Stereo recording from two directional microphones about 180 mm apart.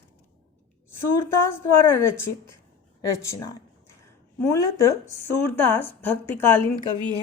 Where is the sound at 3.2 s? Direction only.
15° left (ahead or behind).